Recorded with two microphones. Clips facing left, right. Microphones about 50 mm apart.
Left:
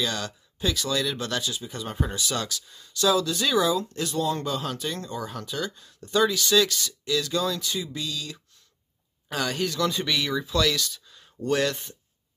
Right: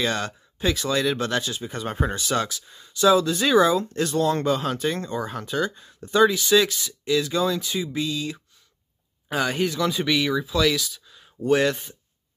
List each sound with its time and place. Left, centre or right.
0.0 s speech: right
9.8 s speech: centre